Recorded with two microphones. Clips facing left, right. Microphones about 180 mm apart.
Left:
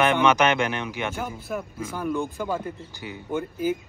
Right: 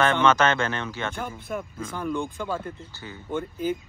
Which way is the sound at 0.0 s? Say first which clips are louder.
Left 1 dB; 15° left (ahead or behind).